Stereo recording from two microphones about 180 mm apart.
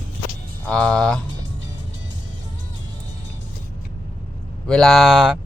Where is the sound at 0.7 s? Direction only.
5° left (ahead or behind).